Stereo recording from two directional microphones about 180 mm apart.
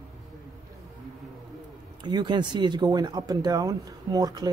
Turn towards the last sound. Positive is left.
turn(degrees=-20)  # may be behind; listen again after turning